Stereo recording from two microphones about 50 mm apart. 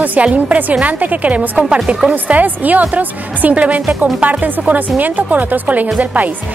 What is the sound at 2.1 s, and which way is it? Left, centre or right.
A woman's voice, right.